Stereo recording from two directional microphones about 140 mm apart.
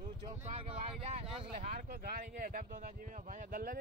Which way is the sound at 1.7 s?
90° right.